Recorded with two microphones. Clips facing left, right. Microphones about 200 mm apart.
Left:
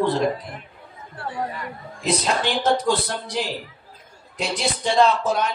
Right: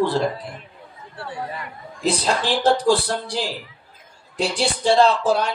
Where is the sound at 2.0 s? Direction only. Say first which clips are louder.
Right 1 dB; 30° right (ahead or behind).